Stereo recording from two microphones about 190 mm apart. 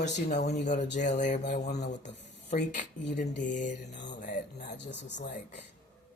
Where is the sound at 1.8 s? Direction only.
65° left (ahead or behind).